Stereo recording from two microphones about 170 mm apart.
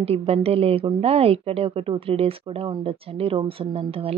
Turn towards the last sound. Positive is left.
turn(degrees=-35)  # may be behind; listen again after turning